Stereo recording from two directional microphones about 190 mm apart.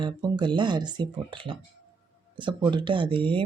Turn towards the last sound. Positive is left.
turn(degrees=-25)  # may be behind; listen again after turning